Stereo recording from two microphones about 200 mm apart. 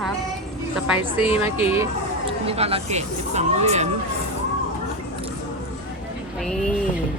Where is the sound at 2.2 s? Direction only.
30° right (ahead or behind).